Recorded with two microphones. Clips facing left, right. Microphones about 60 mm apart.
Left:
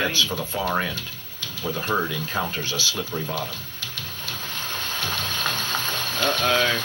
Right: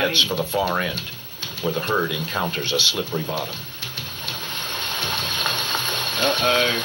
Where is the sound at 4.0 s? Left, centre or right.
Right.